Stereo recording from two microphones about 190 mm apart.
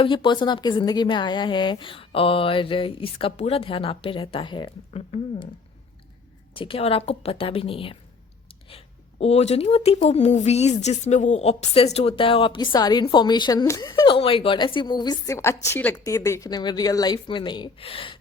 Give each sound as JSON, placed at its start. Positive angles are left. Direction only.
{"t": 0.0, "sound": "speech", "side_deg": 25}
{"t": 6.5, "sound": "speech", "side_deg": 30}